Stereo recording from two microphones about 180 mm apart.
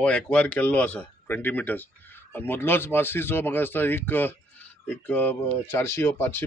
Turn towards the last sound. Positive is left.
turn(degrees=10)  # may be behind; listen again after turning